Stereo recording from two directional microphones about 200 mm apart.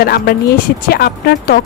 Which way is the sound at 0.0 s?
50° left (ahead or behind).